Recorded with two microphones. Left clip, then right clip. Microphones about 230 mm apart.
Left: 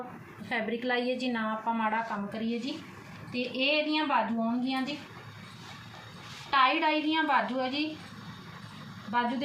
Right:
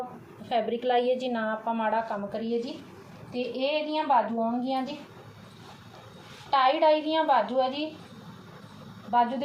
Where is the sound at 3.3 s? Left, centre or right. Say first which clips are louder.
Right 2 dB; left.